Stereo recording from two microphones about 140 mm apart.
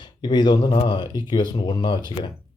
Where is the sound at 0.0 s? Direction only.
30° left (ahead or behind).